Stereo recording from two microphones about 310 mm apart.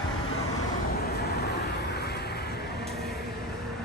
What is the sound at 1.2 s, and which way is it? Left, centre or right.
Vehicle, left.